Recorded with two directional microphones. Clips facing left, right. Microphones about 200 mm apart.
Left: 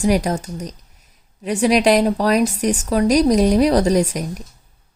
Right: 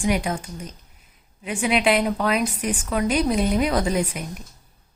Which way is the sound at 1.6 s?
40° left (ahead or behind).